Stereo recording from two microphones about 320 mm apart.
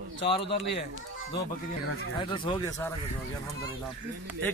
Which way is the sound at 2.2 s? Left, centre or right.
Centre.